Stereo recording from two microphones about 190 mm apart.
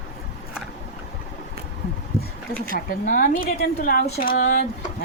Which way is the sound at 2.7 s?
45° left (ahead or behind).